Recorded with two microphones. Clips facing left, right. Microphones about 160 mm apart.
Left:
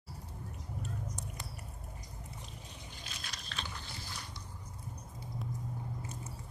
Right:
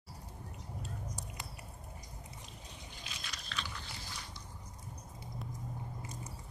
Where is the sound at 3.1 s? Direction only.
45° left (ahead or behind).